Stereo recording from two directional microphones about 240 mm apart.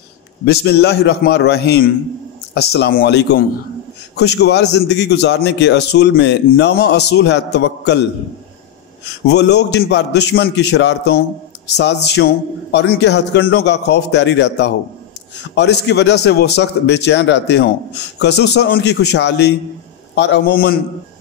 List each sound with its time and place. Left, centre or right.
0.5 s a man's voice: left
9.3 s a man's voice: left